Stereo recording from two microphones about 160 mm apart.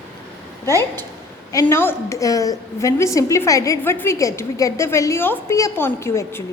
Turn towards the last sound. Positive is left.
turn(degrees=15)  # may be behind; listen again after turning